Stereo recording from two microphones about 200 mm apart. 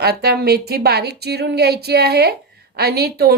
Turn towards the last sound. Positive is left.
turn(degrees=-50)  # may be behind; listen again after turning